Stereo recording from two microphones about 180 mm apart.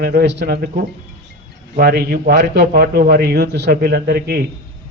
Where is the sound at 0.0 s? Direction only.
60° right (ahead or behind).